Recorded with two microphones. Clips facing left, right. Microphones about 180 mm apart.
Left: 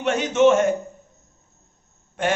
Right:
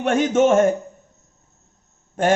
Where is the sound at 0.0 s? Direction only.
50° right (ahead or behind).